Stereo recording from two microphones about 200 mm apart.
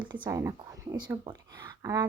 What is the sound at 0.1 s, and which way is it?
Speech, 15° right (ahead or behind).